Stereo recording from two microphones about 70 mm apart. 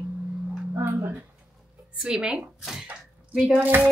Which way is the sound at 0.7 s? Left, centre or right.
Right.